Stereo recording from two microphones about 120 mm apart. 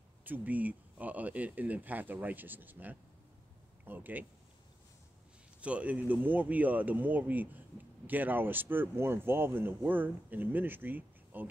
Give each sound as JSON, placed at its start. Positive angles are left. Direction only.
{"t": 0.2, "sound": "speech", "side_deg": -15}
{"t": 5.6, "sound": "speech", "side_deg": -10}